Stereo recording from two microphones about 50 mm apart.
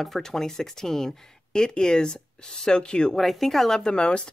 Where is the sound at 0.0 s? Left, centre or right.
Centre.